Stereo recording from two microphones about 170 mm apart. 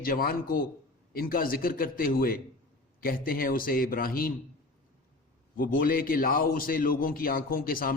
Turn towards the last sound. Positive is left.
turn(degrees=55)  # may be behind; listen again after turning